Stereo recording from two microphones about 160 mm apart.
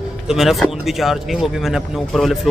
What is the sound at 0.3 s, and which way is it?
A man's voice, centre (ahead or behind).